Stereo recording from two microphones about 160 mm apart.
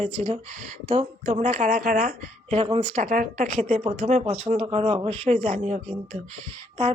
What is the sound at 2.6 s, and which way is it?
Speech, 40° right (ahead or behind).